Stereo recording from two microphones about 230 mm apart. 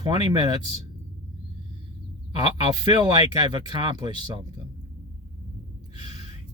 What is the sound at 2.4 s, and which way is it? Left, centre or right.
Speech, centre.